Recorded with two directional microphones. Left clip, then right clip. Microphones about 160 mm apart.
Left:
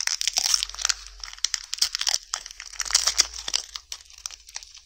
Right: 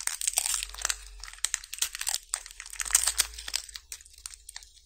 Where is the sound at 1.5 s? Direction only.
25° left (ahead or behind).